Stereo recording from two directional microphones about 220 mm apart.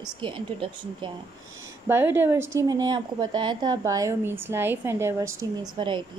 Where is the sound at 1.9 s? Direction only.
10° right (ahead or behind).